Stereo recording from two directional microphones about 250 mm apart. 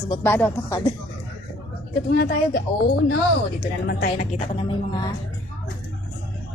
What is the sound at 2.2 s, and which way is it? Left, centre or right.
A woman's voice, left.